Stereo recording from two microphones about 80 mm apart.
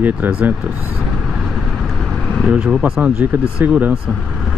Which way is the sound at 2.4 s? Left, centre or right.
Centre.